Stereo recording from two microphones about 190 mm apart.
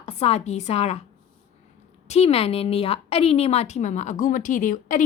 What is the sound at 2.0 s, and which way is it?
A woman's voice, 35° left (ahead or behind).